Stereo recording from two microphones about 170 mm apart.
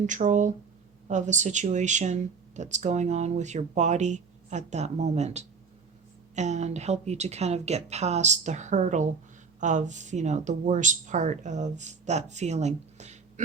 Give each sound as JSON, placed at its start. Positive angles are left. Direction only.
{"t": 0.0, "sound": "speech", "side_deg": -45}